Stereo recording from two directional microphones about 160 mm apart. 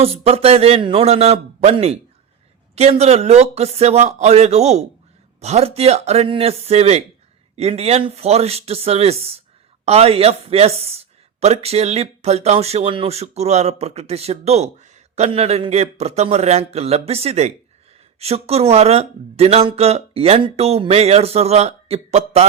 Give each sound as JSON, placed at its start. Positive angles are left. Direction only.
{"t": 0.0, "sound": "speech", "side_deg": -35}